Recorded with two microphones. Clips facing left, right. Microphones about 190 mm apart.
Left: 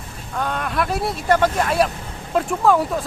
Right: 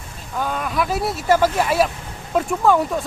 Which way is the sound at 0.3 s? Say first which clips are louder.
Even; centre (ahead or behind).